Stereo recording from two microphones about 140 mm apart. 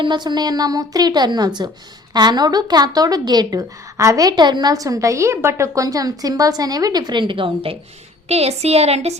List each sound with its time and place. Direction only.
0.0 s a woman's voice: 30° right (ahead or behind); by 9.1 s 50° right (ahead or behind)